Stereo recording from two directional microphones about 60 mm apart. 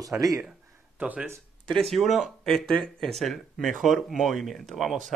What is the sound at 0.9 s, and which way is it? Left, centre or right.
Speech, right.